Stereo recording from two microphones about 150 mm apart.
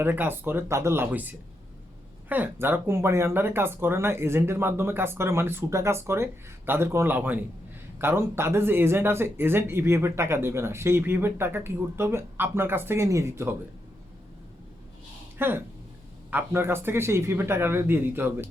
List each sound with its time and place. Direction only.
0.0 s speech: 15° right (ahead or behind)
15.4 s speech: 15° right (ahead or behind)